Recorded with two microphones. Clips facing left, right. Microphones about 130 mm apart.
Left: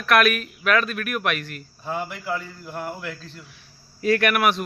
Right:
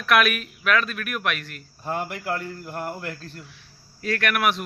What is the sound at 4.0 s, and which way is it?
Speech, 10° left (ahead or behind).